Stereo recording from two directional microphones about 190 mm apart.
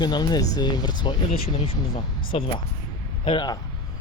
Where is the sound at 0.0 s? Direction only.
20° left (ahead or behind).